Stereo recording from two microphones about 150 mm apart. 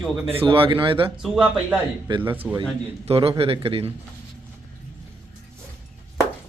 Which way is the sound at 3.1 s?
40° right (ahead or behind).